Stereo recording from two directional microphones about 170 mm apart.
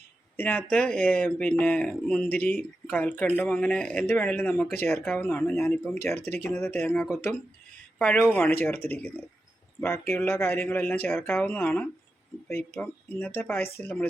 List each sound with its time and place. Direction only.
0.3 s speech: 10° left (ahead or behind)
6.1 s speech: 70° left (ahead or behind)
6.4 s speech: 10° left (ahead or behind)